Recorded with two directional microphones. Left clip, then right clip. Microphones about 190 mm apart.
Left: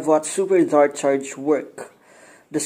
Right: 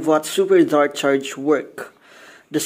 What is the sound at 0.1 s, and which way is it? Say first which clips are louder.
Speech: right 2 dB; 20° right (ahead or behind).